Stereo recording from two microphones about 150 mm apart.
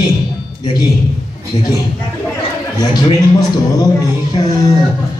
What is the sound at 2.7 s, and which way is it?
Speech, 25° left (ahead or behind).